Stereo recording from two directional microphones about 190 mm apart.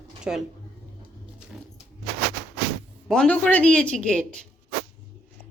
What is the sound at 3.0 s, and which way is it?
Speech, 5° left (ahead or behind).